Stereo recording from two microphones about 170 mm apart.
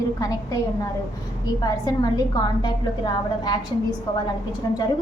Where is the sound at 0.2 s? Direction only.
20° left (ahead or behind).